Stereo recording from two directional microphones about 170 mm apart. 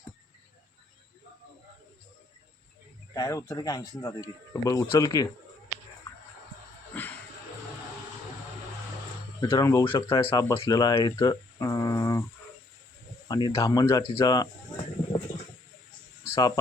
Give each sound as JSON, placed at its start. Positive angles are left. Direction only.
{"t": 3.2, "sound": "speech", "side_deg": 20}
{"t": 6.9, "sound": "a sound", "side_deg": 10}
{"t": 9.4, "sound": "speech", "side_deg": 20}
{"t": 9.8, "sound": "speech", "side_deg": 30}
{"t": 13.2, "sound": "speech", "side_deg": 25}
{"t": 14.1, "sound": "bird", "side_deg": 25}